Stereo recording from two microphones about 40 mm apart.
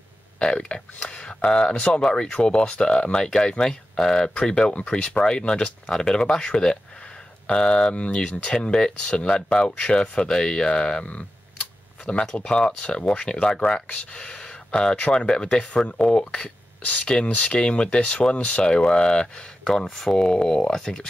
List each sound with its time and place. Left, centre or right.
0.4 s speech: left
12.1 s speech: left